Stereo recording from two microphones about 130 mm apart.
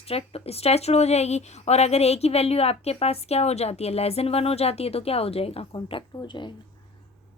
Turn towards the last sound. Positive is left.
turn(degrees=35)  # may be behind; listen again after turning